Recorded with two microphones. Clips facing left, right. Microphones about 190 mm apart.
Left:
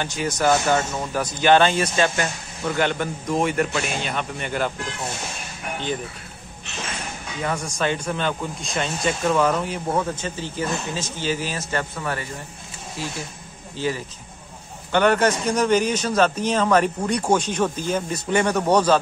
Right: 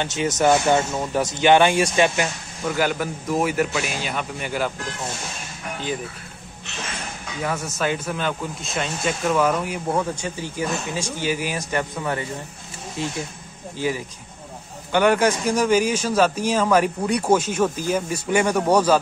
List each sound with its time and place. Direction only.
0.0 s speech: 20° right (ahead or behind); by 4.7 s 5° right (ahead or behind)
7.4 s speech: 5° right (ahead or behind)